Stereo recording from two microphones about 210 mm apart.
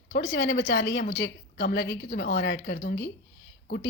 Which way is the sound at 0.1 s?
50° left (ahead or behind).